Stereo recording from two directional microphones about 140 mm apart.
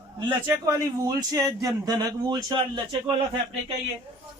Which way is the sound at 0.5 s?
25° right (ahead or behind).